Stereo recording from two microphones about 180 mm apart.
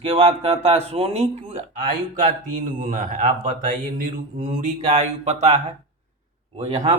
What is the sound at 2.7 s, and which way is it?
Speech, 50° right (ahead or behind).